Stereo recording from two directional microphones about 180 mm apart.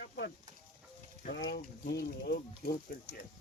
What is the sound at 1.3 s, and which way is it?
Speech, 75° left (ahead or behind).